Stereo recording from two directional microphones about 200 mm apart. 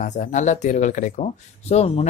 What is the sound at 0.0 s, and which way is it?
Speech, 35° left (ahead or behind).